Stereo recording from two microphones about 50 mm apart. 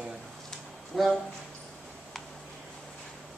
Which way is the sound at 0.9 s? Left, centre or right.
Centre.